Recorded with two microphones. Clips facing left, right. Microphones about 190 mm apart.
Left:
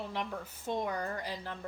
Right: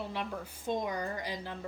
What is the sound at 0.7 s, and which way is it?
Speech, 10° right (ahead or behind).